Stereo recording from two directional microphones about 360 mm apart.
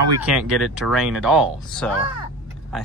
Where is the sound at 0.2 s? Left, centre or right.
Centre.